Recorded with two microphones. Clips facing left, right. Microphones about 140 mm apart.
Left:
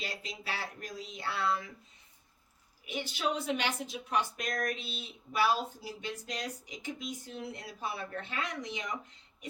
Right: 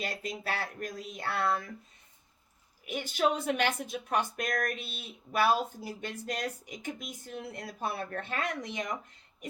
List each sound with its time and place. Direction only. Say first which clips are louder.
0.0 s a woman's voice: right 5 dB; 50° right (ahead or behind)
2.8 s a woman's voice: right 5 dB; 45° right (ahead or behind)